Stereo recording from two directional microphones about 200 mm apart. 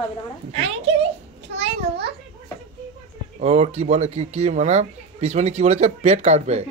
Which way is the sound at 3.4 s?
35° right (ahead or behind).